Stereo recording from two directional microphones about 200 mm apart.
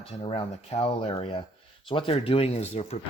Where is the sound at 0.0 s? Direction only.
30° left (ahead or behind).